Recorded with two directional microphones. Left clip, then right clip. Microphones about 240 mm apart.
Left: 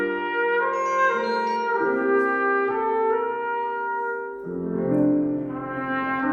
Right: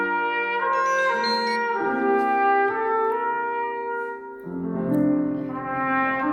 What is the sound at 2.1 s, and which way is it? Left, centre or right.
Trumpet, centre.